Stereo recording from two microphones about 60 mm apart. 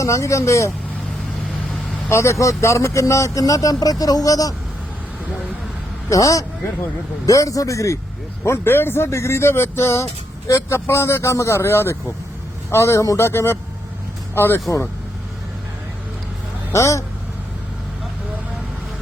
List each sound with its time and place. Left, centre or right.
0.0 s speech: left
2.0 s speech: left
6.1 s speech: left
8.4 s a man's voice: left
16.7 s speech: left